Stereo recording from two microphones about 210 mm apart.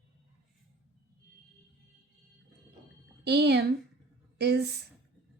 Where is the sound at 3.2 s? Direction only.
50° right (ahead or behind).